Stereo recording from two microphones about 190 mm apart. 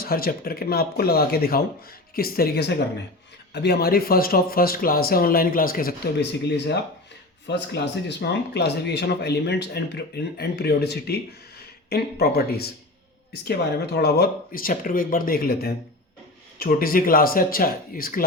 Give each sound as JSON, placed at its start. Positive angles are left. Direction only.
{"t": 0.0, "sound": "speech", "side_deg": 50}
{"t": 7.4, "sound": "speech", "side_deg": 65}